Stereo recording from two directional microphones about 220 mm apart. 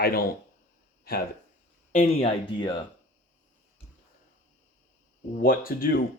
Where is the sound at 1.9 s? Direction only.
35° left (ahead or behind).